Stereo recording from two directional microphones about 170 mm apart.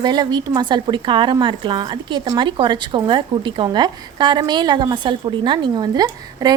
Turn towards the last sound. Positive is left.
turn(degrees=-25)  # may be behind; listen again after turning